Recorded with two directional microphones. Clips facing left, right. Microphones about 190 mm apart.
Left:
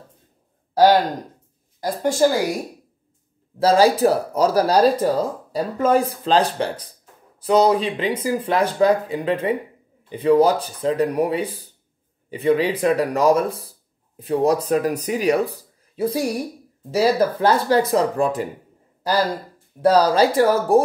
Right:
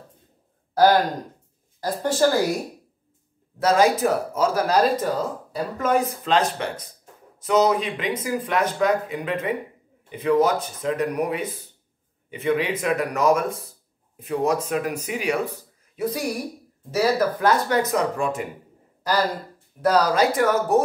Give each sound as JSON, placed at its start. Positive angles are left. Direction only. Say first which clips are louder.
{"t": 1.8, "sound": "speech", "louder": "left 3 dB", "side_deg": 15}
{"t": 3.5, "sound": "speech", "louder": "left 3 dB", "side_deg": 30}
{"t": 19.8, "sound": "speech", "louder": "left 4 dB", "side_deg": 30}